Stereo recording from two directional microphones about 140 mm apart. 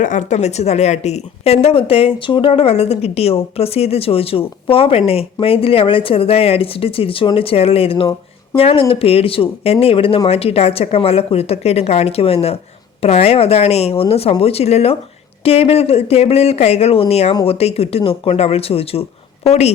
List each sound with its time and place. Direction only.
0.0 s a woman's voice: 65° left (ahead or behind)